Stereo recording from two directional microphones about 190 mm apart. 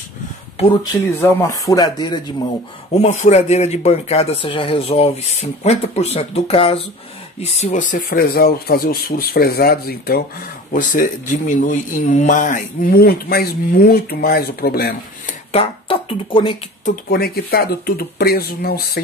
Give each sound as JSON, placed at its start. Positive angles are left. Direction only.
{"t": 1.2, "sound": "speech", "side_deg": 15}
{"t": 2.9, "sound": "speech", "side_deg": 35}
{"t": 15.5, "sound": "speech", "side_deg": 30}
{"t": 16.8, "sound": "speech", "side_deg": 55}